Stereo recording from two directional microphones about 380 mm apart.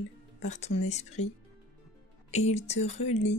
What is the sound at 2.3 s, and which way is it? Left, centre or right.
Speech, centre.